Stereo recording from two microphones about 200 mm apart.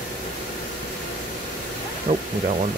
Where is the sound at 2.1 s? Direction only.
40° right (ahead or behind).